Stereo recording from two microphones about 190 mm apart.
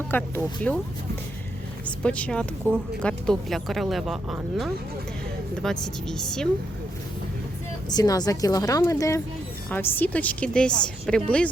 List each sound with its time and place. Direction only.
0.1 s a woman's voice: 10° left (ahead or behind)
2.0 s speech: 5° left (ahead or behind)
5.8 s speech: centre (ahead or behind)
7.9 s a woman's voice: 20° left (ahead or behind)